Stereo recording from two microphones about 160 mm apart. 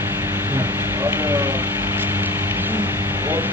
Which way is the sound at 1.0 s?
15° right (ahead or behind).